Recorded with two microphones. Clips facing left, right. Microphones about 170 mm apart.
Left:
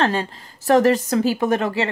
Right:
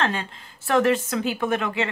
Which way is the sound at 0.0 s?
35° left (ahead or behind).